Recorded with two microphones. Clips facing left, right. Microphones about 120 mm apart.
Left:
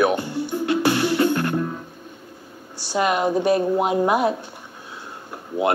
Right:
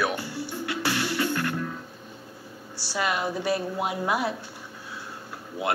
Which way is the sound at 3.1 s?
15° left (ahead or behind).